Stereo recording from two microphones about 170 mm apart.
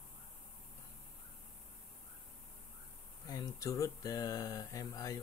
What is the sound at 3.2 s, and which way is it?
Speech, 25° left (ahead or behind).